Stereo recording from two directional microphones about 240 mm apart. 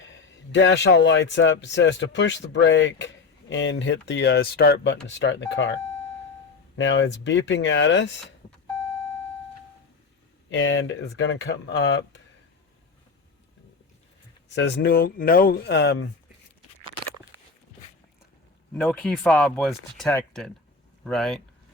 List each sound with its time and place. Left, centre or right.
0.0 s speech: left
6.7 s speech: left
10.5 s speech: left
14.5 s speech: left
18.7 s speech: centre